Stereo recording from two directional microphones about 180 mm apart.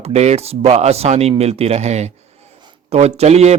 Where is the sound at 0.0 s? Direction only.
35° right (ahead or behind).